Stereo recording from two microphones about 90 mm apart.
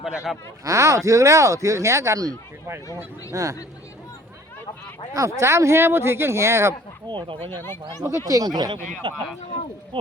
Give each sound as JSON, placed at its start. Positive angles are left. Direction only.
{"t": 0.0, "sound": "speech", "side_deg": -5}
{"t": 0.6, "sound": "speech", "side_deg": -35}
{"t": 5.1, "sound": "speech", "side_deg": -35}
{"t": 7.1, "sound": "speech", "side_deg": -70}
{"t": 7.5, "sound": "speech", "side_deg": 25}
{"t": 8.0, "sound": "speech", "side_deg": -35}
{"t": 9.0, "sound": "speech", "side_deg": -60}